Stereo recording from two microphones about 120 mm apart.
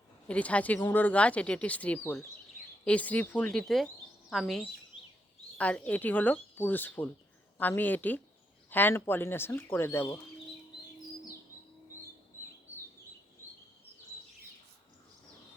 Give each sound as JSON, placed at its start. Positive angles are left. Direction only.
{"t": 0.3, "sound": "speech", "side_deg": 10}